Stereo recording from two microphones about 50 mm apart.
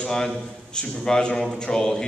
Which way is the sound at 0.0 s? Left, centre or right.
Centre.